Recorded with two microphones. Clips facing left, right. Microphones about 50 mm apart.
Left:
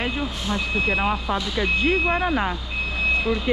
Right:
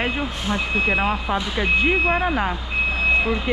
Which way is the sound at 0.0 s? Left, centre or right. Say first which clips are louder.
Right 2 dB; right.